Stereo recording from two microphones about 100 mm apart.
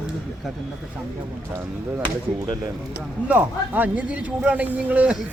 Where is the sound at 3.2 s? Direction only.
15° right (ahead or behind).